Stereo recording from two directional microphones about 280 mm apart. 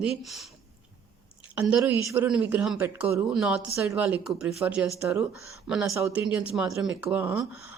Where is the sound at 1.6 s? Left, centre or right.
Centre.